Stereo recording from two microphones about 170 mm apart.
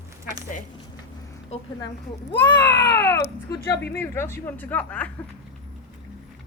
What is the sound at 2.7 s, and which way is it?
Baby cry, 80° left.